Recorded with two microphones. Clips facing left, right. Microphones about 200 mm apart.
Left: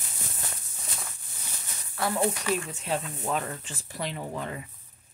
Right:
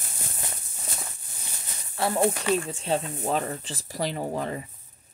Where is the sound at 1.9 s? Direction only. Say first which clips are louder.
Right 3 dB; 25° right (ahead or behind).